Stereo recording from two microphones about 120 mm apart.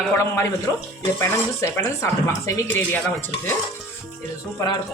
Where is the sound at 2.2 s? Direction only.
20° left (ahead or behind).